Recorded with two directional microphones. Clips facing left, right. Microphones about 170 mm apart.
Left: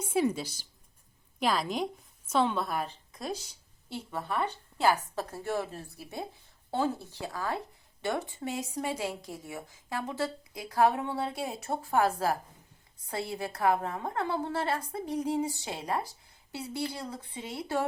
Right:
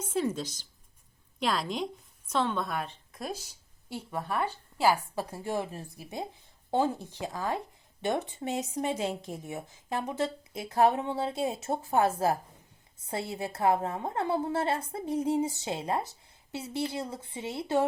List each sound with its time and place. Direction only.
0.0 s a woman's voice: 10° left (ahead or behind)
3.8 s a woman's voice: 10° right (ahead or behind)